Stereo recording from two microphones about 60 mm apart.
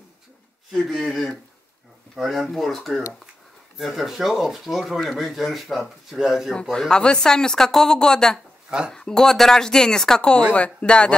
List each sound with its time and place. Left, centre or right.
0.7 s speech: centre
6.5 s speech: centre
8.6 s speech: centre
8.9 s speech: centre